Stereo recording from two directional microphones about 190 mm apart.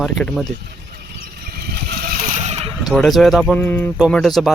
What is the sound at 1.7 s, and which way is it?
Vehicle, 55° right (ahead or behind).